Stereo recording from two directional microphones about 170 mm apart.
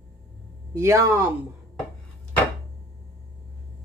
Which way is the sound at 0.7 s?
15° right (ahead or behind).